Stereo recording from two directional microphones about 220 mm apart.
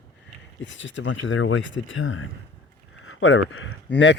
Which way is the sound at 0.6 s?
60° left (ahead or behind).